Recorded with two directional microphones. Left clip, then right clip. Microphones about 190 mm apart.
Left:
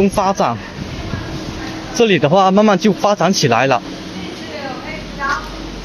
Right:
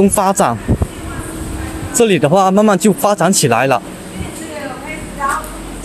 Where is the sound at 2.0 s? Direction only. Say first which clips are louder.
Right 1 dB; 10° right (ahead or behind).